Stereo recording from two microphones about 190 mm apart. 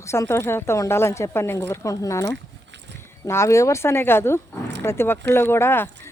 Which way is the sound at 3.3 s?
15° left (ahead or behind).